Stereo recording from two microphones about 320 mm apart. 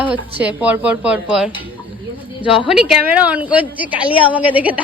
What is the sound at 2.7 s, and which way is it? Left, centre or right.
A woman's voice, centre.